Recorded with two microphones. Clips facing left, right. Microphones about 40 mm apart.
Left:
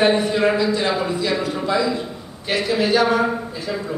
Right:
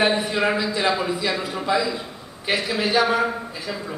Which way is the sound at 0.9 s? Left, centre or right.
Centre.